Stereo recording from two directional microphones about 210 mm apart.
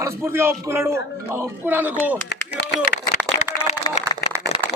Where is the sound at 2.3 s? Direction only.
50° left (ahead or behind).